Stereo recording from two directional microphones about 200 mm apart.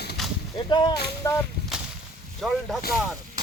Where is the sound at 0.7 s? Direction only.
20° left (ahead or behind).